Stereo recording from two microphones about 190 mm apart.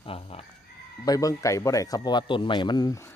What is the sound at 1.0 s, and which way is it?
A man's voice, 20° left (ahead or behind).